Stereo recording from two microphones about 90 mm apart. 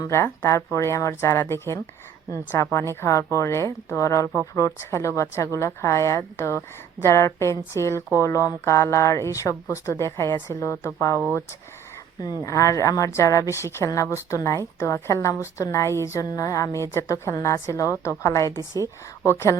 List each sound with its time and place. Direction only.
0.1 s speech: 30° left (ahead or behind)
12.4 s speech: 35° left (ahead or behind)